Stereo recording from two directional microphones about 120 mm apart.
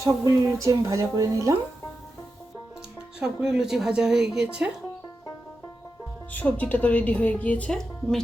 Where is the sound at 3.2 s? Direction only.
5° right (ahead or behind).